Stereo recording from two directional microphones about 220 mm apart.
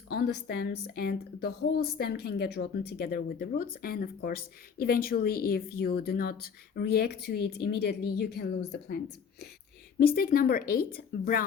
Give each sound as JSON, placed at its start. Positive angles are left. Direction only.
{"t": 0.1, "sound": "a woman's voice", "side_deg": 45}
{"t": 10.0, "sound": "a woman's voice", "side_deg": 40}